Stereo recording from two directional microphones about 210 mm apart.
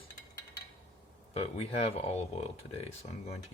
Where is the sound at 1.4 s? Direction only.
30° left (ahead or behind).